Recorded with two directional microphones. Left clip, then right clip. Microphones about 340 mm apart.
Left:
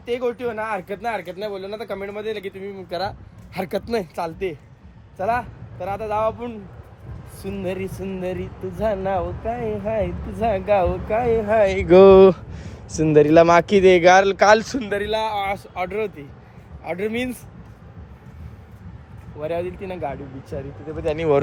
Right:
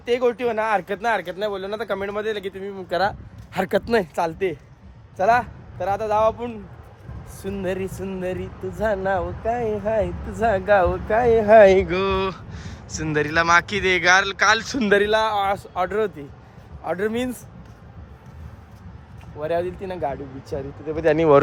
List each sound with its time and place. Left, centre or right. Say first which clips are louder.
0.0 s speech: right 3 dB; centre
11.4 s speech: right 10 dB; right
11.9 s speech: left 13 dB; centre
15.0 s speech: right 3 dB; centre
19.4 s speech: right 2 dB; centre
20.9 s speech: right 6 dB; right